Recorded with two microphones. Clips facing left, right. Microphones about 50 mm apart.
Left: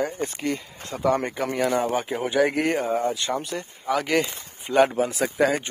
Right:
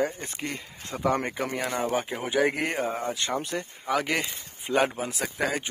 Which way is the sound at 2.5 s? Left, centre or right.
Centre.